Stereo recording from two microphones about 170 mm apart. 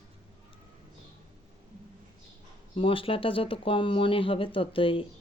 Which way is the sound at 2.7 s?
30° left (ahead or behind).